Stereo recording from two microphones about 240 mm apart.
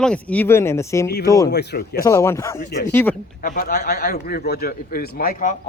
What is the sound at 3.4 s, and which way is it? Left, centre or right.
Speech, left.